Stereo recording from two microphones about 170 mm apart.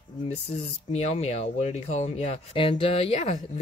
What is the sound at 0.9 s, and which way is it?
Speech, 40° left (ahead or behind).